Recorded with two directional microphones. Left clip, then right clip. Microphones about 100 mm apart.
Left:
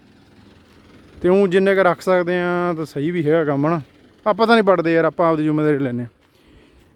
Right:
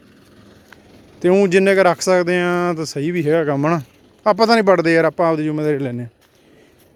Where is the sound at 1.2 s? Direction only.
15° left (ahead or behind).